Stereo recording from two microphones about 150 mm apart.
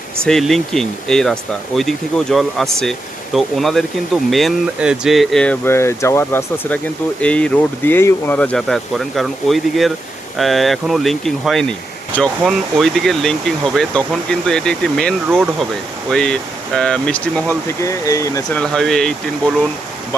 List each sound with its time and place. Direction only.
0.3 s speech: 5° left (ahead or behind)
17.8 s speech: 20° left (ahead or behind)
18.5 s speech: 5° left (ahead or behind)